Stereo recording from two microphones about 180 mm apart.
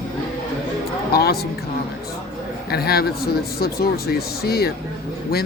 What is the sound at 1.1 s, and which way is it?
Speech, 60° left (ahead or behind).